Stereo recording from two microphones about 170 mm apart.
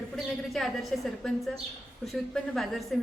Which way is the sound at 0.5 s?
Centre (ahead or behind).